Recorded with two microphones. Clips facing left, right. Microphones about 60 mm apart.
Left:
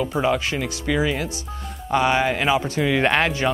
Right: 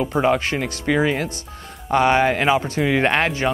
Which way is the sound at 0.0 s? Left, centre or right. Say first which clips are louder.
Right 2 dB; right.